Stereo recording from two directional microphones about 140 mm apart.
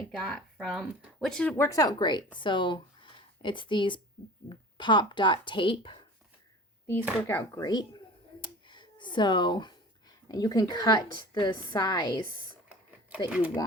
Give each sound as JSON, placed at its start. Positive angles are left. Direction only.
{"t": 0.2, "sound": "speech", "side_deg": 5}
{"t": 7.2, "sound": "speech", "side_deg": 15}
{"t": 7.6, "sound": "a woman's voice", "side_deg": 30}
{"t": 8.4, "sound": "finger snapping", "side_deg": 35}
{"t": 10.2, "sound": "a woman's voice", "side_deg": 25}
{"t": 12.6, "sound": "a sound", "side_deg": -10}